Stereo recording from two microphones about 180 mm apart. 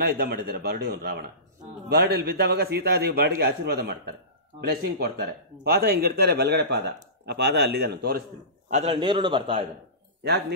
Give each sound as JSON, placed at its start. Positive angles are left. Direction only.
{"t": 0.0, "sound": "speech", "side_deg": -60}
{"t": 8.6, "sound": "a man's voice", "side_deg": -40}